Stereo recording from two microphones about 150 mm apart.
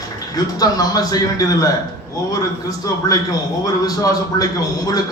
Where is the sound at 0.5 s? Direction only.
25° left (ahead or behind).